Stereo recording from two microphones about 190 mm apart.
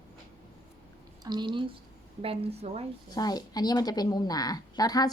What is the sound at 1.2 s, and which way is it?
A woman's voice, 20° right (ahead or behind).